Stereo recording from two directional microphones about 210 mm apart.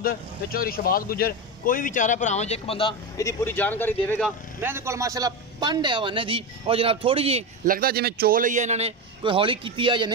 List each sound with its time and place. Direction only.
0.0 s speech: 45° left (ahead or behind); by 4.3 s 10° left (ahead or behind)
4.6 s a man's voice: 10° right (ahead or behind); by 7.4 s 30° right (ahead or behind)
7.6 s a man's voice: 45° right (ahead or behind); by 10.1 s 20° right (ahead or behind)